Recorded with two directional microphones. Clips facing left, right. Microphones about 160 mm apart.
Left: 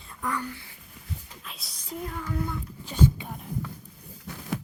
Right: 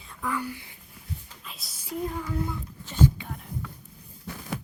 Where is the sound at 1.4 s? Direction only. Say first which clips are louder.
Left 1 dB; centre (ahead or behind).